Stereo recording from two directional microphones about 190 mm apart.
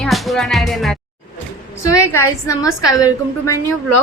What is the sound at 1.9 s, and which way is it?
A woman's voice, 15° left (ahead or behind).